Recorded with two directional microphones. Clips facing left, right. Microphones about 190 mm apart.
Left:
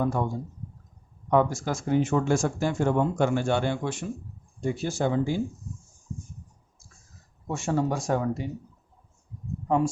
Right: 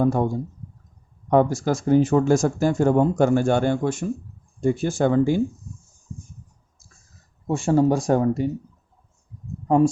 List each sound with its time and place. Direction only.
0.0 s speech: 40° right (ahead or behind)
1.3 s speech: 40° right (ahead or behind); by 5.4 s 55° right (ahead or behind)
7.4 s speech: 30° right (ahead or behind)
9.6 s speech: 40° right (ahead or behind)